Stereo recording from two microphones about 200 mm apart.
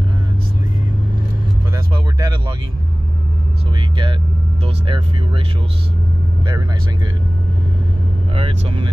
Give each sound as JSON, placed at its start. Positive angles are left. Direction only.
{"t": 2.1, "sound": "speech", "side_deg": -20}
{"t": 3.9, "sound": "speech", "side_deg": -25}
{"t": 8.4, "sound": "speech", "side_deg": -30}